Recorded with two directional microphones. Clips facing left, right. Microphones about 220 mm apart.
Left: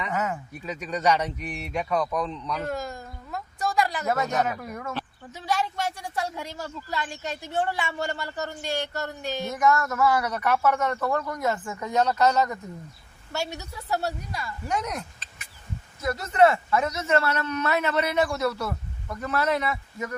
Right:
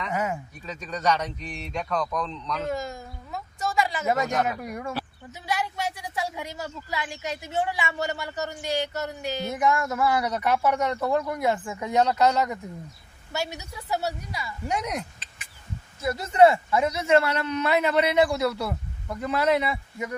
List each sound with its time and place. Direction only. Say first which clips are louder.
0.1 s a sound: right 1 dB; 15° right (ahead or behind)
0.6 s a man's voice: left 3 dB; 10° left (ahead or behind)
2.6 s a sound: right 1 dB; centre (ahead or behind)
4.6 s a man's voice: right 2 dB; 15° right (ahead or behind)
5.7 s speech: left 1 dB; centre (ahead or behind)
9.5 s a man's voice: left 1 dB; 15° right (ahead or behind)
13.3 s speech: even; centre (ahead or behind)
14.7 s a sound: right 1 dB; 15° right (ahead or behind)
16.0 s a man's voice: right 2 dB; 15° right (ahead or behind)